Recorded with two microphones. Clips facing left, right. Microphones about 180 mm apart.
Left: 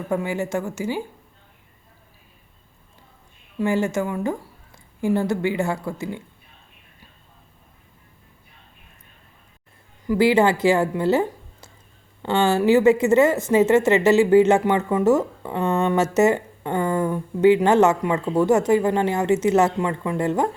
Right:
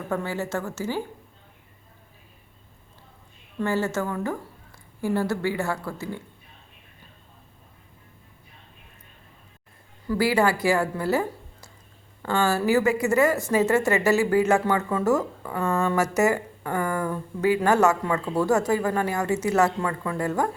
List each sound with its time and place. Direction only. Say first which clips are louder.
0.1 s speech: left 4 dB; 15° left (ahead or behind)
3.6 s a woman's voice: left 4 dB; 15° left (ahead or behind)
10.1 s speech: left 5 dB; 20° left (ahead or behind)